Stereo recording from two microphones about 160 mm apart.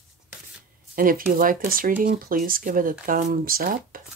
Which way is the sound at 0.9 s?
60° right (ahead or behind).